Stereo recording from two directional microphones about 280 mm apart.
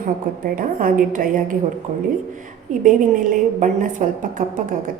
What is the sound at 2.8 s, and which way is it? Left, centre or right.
A woman's voice, right.